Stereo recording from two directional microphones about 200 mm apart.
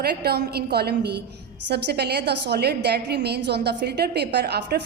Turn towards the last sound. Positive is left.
turn(degrees=-55)  # may be behind; listen again after turning